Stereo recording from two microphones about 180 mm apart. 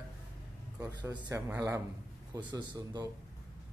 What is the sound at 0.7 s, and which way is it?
A man's voice, 20° right (ahead or behind).